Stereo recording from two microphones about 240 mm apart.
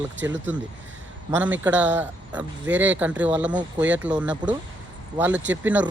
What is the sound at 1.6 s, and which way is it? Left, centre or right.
Speech, centre.